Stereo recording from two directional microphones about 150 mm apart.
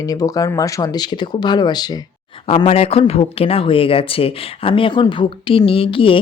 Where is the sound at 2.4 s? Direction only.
40° left (ahead or behind).